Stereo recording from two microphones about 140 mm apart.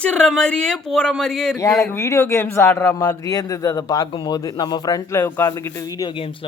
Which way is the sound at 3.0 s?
25° left (ahead or behind).